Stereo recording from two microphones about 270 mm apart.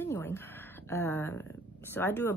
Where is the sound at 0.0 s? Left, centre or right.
Centre.